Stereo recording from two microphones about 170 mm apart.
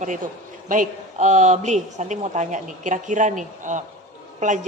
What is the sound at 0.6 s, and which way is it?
A woman's voice, 45° right (ahead or behind).